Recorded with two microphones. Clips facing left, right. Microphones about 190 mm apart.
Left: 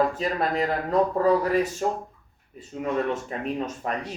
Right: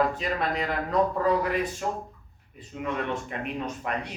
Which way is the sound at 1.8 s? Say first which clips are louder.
Left 4 dB; 35° left (ahead or behind).